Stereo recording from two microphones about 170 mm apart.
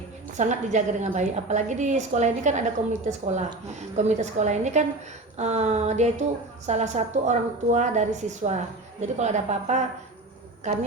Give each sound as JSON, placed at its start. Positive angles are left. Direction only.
{"t": 0.3, "sound": "a woman's voice", "side_deg": -45}